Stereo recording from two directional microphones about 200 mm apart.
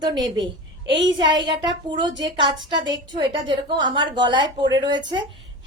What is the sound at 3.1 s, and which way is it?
A woman's voice, 25° right (ahead or behind).